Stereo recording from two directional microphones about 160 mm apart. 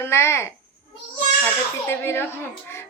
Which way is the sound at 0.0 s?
15° left (ahead or behind).